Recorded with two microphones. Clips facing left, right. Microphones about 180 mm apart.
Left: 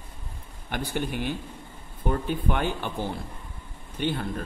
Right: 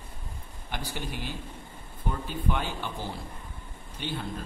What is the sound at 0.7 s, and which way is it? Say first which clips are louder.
A man's voice: left 6 dB; 55° left (ahead or behind).